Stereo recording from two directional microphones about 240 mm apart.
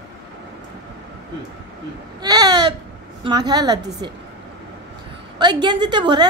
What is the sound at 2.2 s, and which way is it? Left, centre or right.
A woman's voice, centre.